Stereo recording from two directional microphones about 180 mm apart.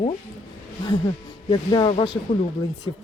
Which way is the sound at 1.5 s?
25° left (ahead or behind).